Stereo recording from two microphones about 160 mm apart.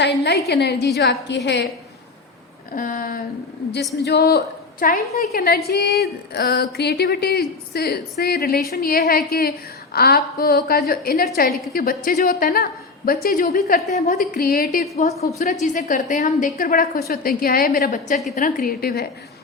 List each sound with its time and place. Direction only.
0.0 s a woman's voice: 90° left
2.7 s a woman's voice: 60° left (ahead or behind)
4.0 s a woman's voice: 85° left; by 15.0 s 65° left (ahead or behind)
15.6 s a woman's voice: 50° left (ahead or behind); by 19.0 s 70° left (ahead or behind)